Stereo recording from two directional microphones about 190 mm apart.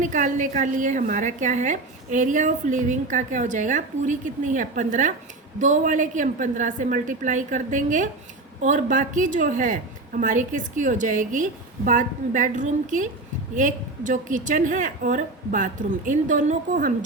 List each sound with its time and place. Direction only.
0.0 s a woman's voice: 40° right (ahead or behind)